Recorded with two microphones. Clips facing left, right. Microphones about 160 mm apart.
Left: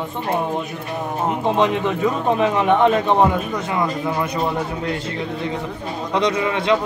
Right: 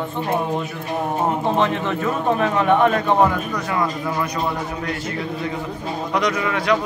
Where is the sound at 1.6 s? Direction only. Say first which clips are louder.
Left 2 dB; 15° left (ahead or behind).